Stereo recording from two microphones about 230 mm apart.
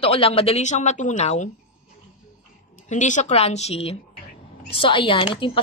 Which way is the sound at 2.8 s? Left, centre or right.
Left.